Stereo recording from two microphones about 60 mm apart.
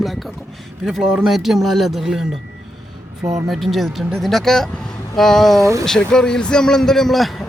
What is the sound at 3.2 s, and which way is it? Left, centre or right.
Speech, right.